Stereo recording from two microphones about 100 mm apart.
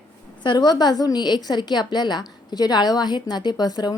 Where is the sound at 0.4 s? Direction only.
45° left (ahead or behind).